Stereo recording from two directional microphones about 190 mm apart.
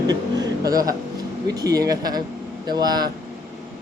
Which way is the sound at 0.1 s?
20° right (ahead or behind).